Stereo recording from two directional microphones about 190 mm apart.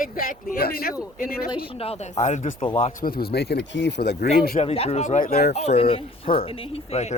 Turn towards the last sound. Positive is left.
turn(degrees=35)  # may be behind; listen again after turning